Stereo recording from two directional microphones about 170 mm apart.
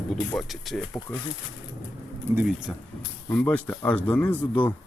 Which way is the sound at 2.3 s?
15° right (ahead or behind).